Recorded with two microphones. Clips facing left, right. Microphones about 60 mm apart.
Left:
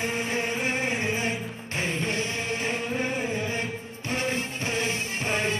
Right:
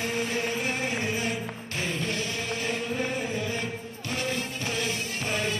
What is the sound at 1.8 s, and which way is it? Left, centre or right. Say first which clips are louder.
Music: left 2 dB; left.